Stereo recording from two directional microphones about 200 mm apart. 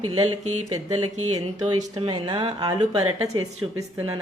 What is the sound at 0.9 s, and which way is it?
Speech, 90° right.